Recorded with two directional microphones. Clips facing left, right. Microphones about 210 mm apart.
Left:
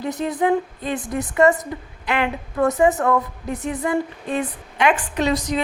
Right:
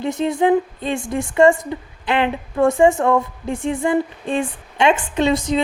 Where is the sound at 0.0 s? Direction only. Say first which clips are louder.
Right 3 dB; 25° right (ahead or behind).